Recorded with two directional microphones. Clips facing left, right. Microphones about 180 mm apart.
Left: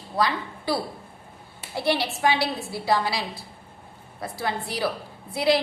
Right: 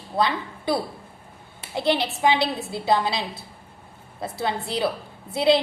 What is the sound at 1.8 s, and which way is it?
A woman's voice, 20° right (ahead or behind).